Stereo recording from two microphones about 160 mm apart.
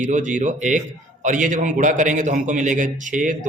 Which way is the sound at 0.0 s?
50° right (ahead or behind).